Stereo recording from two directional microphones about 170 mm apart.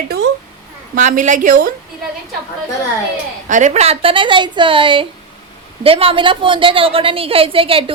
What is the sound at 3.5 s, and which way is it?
A woman's voice, 45° right (ahead or behind).